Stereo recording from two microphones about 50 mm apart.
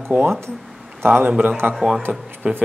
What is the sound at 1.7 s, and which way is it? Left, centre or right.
Speech, centre.